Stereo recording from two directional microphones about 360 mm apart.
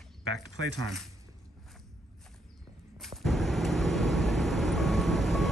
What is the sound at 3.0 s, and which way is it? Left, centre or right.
Vehicle, centre.